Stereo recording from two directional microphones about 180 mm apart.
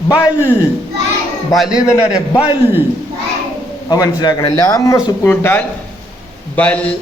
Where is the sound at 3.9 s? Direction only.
20° left (ahead or behind).